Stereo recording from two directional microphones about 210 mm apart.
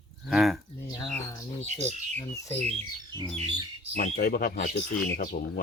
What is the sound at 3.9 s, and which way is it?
Speech, 40° left (ahead or behind).